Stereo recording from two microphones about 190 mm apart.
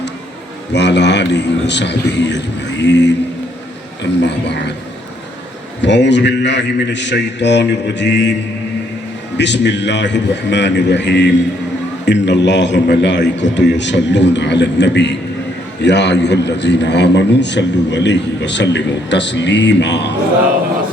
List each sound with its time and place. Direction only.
0.7 s a man's voice: 65° left (ahead or behind)
4.2 s a man's voice: 65° left (ahead or behind)
5.8 s a man's voice: 65° left (ahead or behind)
9.4 s a man's voice: 65° left (ahead or behind)